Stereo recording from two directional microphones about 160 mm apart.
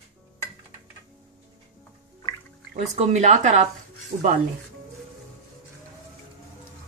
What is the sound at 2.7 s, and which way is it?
A woman's voice, 45° right (ahead or behind).